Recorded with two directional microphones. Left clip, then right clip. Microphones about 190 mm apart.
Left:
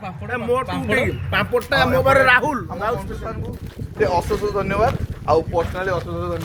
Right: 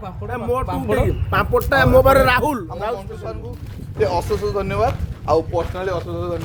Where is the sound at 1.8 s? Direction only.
60° right (ahead or behind); by 2.5 s 75° right (ahead or behind).